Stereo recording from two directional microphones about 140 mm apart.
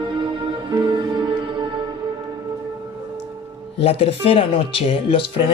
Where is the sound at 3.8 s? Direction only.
45° left (ahead or behind).